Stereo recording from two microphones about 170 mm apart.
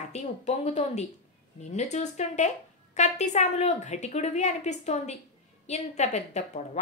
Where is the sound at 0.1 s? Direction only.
40° left (ahead or behind).